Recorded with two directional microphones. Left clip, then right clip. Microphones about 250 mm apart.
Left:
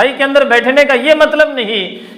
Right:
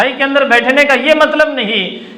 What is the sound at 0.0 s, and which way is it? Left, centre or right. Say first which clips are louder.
A man's voice: left 2 dB; left.